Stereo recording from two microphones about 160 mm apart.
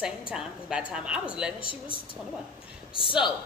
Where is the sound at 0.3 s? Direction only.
5° right (ahead or behind).